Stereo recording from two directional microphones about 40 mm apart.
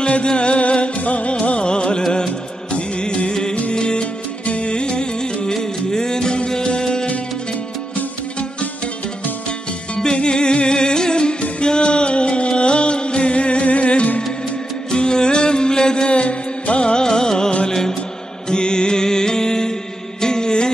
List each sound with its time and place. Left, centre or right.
0.0 s music: left
7.9 s music: left
9.9 s music: left
14.9 s music: centre